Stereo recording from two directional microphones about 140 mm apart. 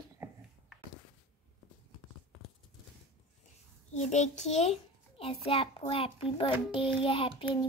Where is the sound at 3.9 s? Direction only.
55° left (ahead or behind); by 6.5 s 40° left (ahead or behind).